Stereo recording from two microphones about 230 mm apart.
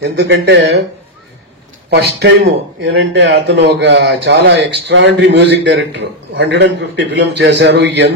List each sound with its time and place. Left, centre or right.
0.0 s speech: right
1.9 s speech: right